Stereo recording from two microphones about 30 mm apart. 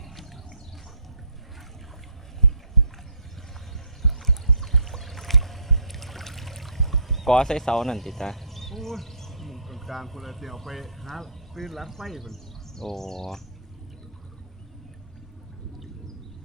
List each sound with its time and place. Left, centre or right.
4.0 s boat: centre
7.3 s speech: left